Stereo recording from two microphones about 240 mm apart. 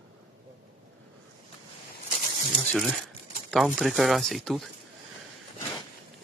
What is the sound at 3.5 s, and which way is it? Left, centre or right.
Speech, centre.